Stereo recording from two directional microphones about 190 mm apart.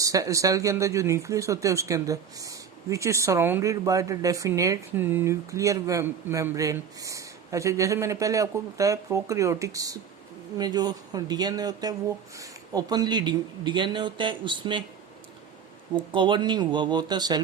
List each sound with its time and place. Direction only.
0.0 s speech: 15° right (ahead or behind)
16.0 s speech: 25° right (ahead or behind)